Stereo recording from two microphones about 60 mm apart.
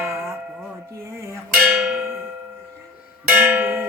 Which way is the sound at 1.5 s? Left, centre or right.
Centre.